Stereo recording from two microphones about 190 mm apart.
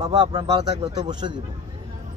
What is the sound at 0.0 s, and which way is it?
Speech, 20° right (ahead or behind).